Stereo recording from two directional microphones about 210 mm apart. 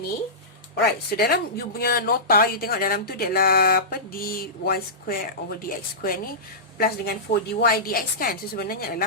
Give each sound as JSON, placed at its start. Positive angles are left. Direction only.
{"t": 0.8, "sound": "speech", "side_deg": 45}